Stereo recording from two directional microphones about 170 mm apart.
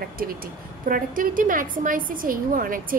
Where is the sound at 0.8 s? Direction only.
55° right (ahead or behind).